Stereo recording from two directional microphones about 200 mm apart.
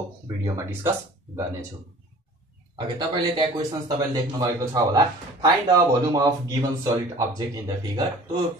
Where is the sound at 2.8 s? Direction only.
20° right (ahead or behind).